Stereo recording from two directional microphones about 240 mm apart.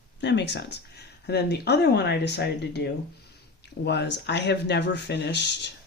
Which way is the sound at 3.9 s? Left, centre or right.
Left.